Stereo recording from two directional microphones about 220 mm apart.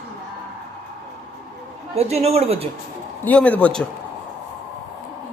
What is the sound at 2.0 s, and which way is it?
Speech, 30° right (ahead or behind).